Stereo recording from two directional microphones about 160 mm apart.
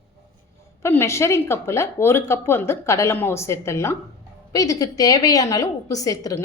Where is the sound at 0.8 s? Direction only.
15° left (ahead or behind).